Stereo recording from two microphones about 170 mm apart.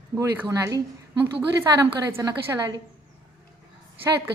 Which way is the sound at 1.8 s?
20° right (ahead or behind).